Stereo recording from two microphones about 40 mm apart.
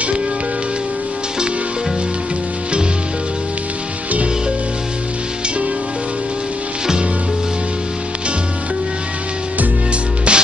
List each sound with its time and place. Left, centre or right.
10.3 s music: right